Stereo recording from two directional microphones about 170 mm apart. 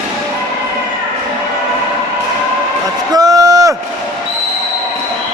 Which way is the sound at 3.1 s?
20° right (ahead or behind).